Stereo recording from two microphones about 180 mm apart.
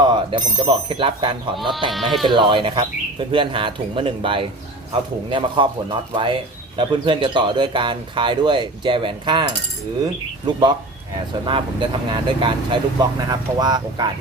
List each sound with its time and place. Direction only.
0.0 s speech: 25° right (ahead or behind)
1.9 s speech: centre (ahead or behind)
2.3 s speech: 25° right (ahead or behind)